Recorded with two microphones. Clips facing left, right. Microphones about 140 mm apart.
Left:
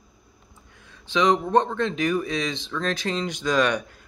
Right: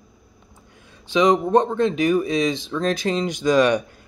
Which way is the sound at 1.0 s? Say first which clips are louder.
Right 4 dB; 10° right (ahead or behind).